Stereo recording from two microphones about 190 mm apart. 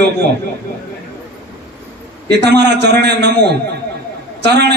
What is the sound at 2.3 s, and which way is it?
A man's voice, 65° right (ahead or behind).